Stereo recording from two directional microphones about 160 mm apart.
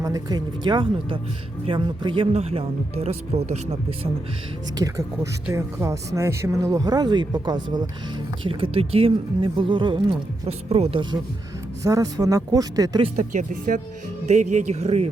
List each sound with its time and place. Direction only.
0.0 s speech: 20° right (ahead or behind); by 4.1 s 40° right (ahead or behind)
4.8 s speech: 20° right (ahead or behind); by 11.0 s 40° right (ahead or behind)
11.8 s speech: 20° right (ahead or behind)
13.1 s speech: 50° right (ahead or behind)